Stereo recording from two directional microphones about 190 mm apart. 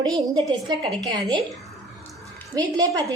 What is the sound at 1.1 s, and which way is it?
Speech, 25° right (ahead or behind).